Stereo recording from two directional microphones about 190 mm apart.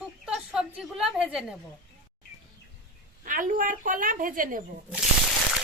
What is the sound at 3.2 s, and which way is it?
A woman's voice, 45° right (ahead or behind).